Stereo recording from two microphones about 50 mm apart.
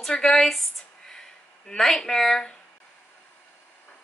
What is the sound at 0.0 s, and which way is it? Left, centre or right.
Speech, centre.